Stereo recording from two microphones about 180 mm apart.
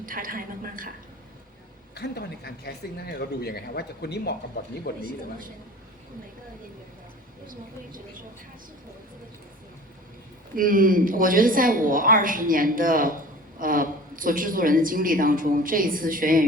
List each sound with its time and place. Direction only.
0.0 s speech: 50° right (ahead or behind)
2.0 s speech: 65° left (ahead or behind)
7.4 s speech: 50° right (ahead or behind)
10.5 s speech: 50° right (ahead or behind)